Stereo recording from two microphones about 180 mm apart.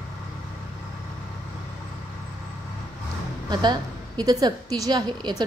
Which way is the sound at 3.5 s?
25° right (ahead or behind).